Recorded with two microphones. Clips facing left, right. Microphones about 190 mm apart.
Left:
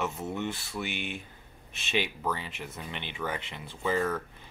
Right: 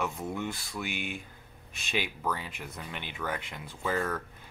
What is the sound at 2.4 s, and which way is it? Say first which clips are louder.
Speech: left 1 dB; 5° left (ahead or behind).